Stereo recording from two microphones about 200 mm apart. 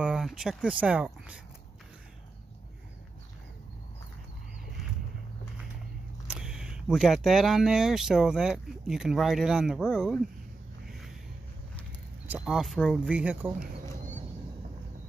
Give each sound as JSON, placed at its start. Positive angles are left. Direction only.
{"t": 0.0, "sound": "speech", "side_deg": 0}
{"t": 6.2, "sound": "speech", "side_deg": -5}
{"t": 12.3, "sound": "speech", "side_deg": 0}
{"t": 13.6, "sound": "a sound", "side_deg": -40}